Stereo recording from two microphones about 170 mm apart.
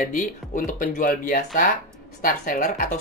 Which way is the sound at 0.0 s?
50° left (ahead or behind).